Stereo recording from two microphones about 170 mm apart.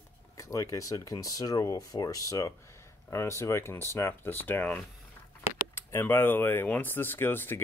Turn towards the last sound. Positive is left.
turn(degrees=10)  # may be behind; listen again after turning